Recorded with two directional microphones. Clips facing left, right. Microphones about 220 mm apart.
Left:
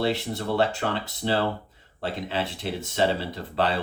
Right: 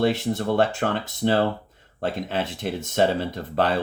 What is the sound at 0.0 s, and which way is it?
Speech, 50° right (ahead or behind).